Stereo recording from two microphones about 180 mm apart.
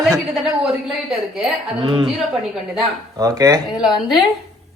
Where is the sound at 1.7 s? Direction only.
25° right (ahead or behind).